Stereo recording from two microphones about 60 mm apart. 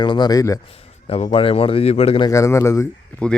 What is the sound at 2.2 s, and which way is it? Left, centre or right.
Speech, left.